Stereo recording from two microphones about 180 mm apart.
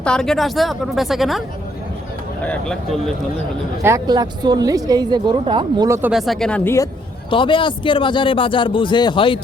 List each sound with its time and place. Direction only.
0.0 s a woman's voice: 5° left (ahead or behind)
2.4 s a woman's voice: 5° left (ahead or behind)
3.8 s a woman's voice: 20° right (ahead or behind)
6.0 s a woman's voice: 5° right (ahead or behind)
7.3 s a man's voice: 25° left (ahead or behind)